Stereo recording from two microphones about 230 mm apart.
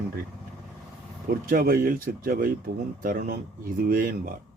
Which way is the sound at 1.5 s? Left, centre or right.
Right.